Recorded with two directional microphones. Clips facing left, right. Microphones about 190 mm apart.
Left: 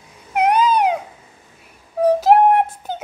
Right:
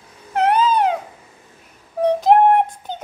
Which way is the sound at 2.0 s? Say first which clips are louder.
Left 1 dB; 5° left (ahead or behind).